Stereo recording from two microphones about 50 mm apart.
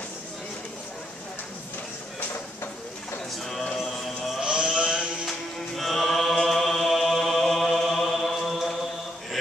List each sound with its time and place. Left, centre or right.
3.3 s music: centre
4.4 s a sound: centre
5.8 s chant: centre